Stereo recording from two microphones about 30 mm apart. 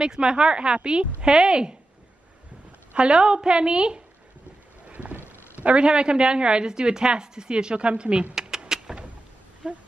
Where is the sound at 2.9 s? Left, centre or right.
Right.